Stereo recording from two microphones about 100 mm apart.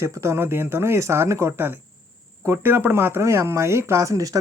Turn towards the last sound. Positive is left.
turn(degrees=-35)  # may be behind; listen again after turning